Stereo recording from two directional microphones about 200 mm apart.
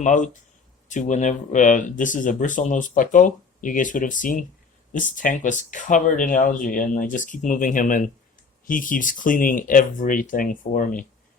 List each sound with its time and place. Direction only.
0.0 s speech: 40° left (ahead or behind)